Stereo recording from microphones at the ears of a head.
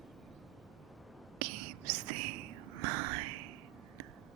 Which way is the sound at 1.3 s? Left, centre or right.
Right.